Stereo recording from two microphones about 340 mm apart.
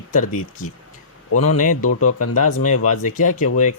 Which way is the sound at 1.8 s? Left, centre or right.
Left.